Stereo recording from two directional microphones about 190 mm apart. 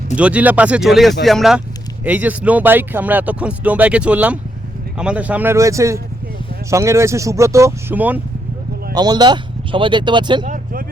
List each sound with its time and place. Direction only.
0.2 s speech: 5° right (ahead or behind)
9.0 s speech: 20° right (ahead or behind)
10.4 s vehicle: 45° right (ahead or behind)